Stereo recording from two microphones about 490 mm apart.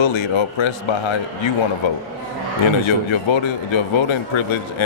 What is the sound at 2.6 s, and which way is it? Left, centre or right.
Speech, left.